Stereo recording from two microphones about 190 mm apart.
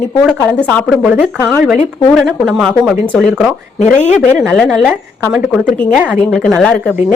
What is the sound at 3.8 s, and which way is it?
Speech, 35° left (ahead or behind).